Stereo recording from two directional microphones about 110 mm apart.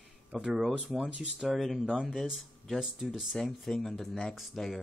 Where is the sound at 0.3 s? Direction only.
Centre (ahead or behind).